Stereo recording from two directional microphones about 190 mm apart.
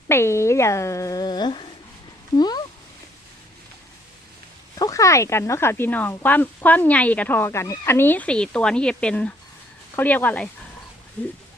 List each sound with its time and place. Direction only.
0.1 s speech: 15° left (ahead or behind)
4.8 s speech: 15° left (ahead or behind)